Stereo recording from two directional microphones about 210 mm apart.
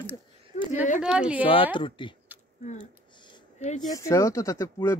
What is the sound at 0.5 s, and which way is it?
Speech, 35° left (ahead or behind).